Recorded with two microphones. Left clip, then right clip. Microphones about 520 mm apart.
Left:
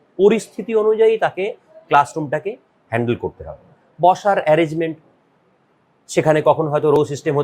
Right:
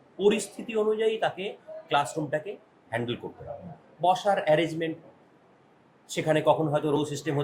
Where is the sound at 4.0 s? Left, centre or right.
Left.